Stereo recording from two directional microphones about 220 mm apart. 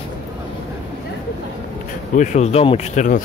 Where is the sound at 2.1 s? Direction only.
35° left (ahead or behind).